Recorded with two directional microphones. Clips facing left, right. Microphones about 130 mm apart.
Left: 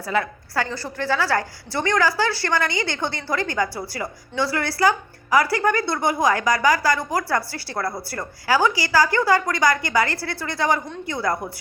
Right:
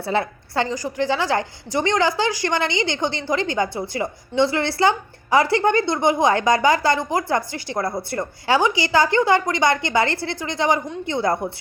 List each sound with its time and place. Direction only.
0.0 s a woman's voice: 30° right (ahead or behind)